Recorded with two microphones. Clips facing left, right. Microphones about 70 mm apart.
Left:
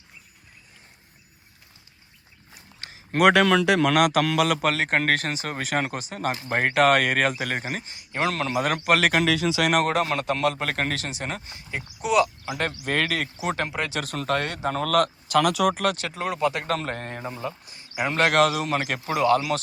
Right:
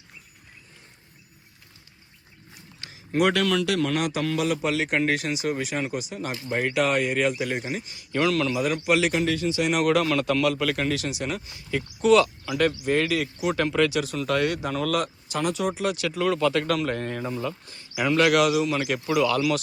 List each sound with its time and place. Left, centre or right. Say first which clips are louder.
2.6 s dog: left 1 dB; left
3.8 s a man's voice: left 5 dB; left
4.7 s speech: left 1 dB; left
7.9 s speech: right 4 dB; left
9.2 s speech: left 2 dB; left
9.8 s speech: right 2 dB; left
12.5 s speech: right 5 dB; left
12.8 s speech: right 2 dB; left
13.6 s speech: right 6 dB; left
13.9 s speech: right 1 dB; left
16.0 s speech: right 2 dB; left
17.2 s speech: even; left
17.9 s speech: right 1 dB; left